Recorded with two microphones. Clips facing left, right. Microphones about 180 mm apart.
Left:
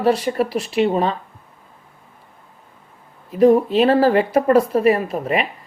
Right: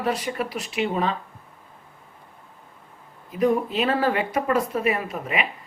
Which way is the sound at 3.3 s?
35° left (ahead or behind).